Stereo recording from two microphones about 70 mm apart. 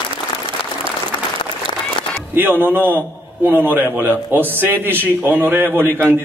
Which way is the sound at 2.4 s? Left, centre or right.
Right.